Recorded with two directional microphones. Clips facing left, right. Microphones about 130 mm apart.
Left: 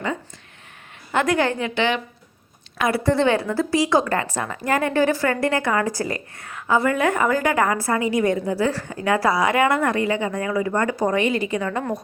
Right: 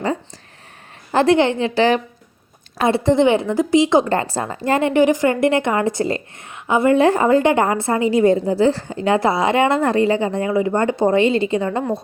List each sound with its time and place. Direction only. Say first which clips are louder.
1.1 s a woman's voice: right 6 dB; 30° right (ahead or behind)
2.7 s a woman's voice: right 4 dB; 25° right (ahead or behind)